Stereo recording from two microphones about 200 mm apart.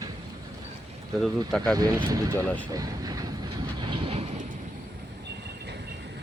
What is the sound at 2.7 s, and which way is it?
Vehicle, 20° right (ahead or behind).